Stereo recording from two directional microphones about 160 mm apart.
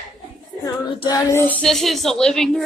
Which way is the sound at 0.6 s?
25° left (ahead or behind).